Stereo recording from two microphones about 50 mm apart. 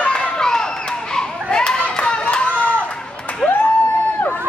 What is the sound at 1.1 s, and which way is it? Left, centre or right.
Clapping, centre.